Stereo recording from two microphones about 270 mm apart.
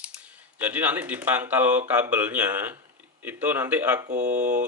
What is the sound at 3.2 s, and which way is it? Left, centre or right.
Speech, centre.